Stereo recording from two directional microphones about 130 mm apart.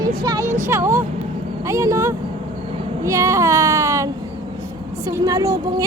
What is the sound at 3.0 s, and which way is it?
A woman's voice, 25° right (ahead or behind).